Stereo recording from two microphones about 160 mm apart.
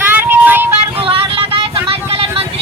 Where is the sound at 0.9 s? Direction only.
35° right (ahead or behind).